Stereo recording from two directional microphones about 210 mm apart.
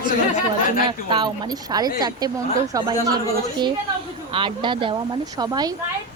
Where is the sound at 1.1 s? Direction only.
20° right (ahead or behind).